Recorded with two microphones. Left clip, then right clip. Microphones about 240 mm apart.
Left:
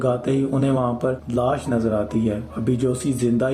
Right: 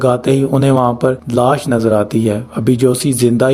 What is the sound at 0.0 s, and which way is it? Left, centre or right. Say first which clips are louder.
Speech: right 8 dB; right.